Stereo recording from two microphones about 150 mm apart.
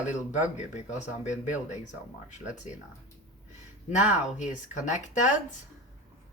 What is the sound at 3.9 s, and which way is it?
Speech, 55° left (ahead or behind).